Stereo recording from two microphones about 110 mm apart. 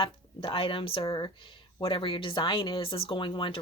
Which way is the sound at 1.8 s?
55° left (ahead or behind).